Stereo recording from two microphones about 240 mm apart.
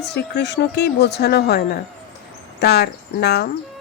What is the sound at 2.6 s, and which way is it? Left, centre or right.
Speech, left.